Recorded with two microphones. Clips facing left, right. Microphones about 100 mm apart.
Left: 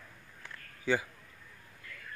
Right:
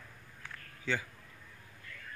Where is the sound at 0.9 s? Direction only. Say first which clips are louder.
Left 5 dB; 10° left (ahead or behind).